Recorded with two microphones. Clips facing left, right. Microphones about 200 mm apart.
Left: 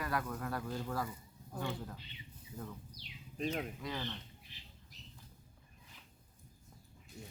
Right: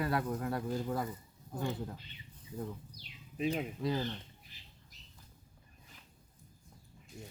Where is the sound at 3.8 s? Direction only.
35° right (ahead or behind).